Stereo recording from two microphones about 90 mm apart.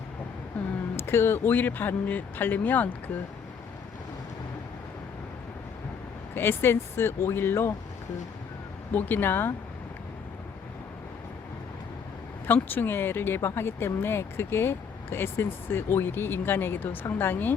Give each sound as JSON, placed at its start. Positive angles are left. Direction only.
{"t": 0.9, "sound": "speech", "side_deg": 25}
{"t": 6.3, "sound": "speech", "side_deg": 25}
{"t": 8.9, "sound": "speech", "side_deg": 20}
{"t": 12.5, "sound": "speech", "side_deg": 20}